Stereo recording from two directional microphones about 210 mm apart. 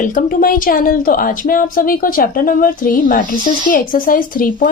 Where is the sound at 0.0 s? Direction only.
40° left (ahead or behind).